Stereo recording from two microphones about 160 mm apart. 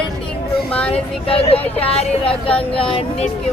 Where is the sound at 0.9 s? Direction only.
35° left (ahead or behind).